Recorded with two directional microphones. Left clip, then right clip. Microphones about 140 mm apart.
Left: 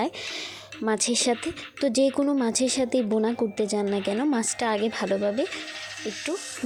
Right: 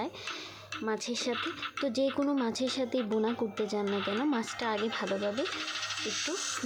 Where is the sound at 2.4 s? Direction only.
25° left (ahead or behind).